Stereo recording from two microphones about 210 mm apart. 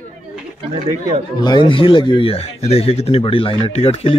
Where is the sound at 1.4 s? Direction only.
20° left (ahead or behind).